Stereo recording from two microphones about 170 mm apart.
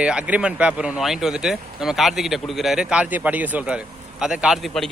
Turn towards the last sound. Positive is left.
turn(degrees=0)  # may be behind; listen again after turning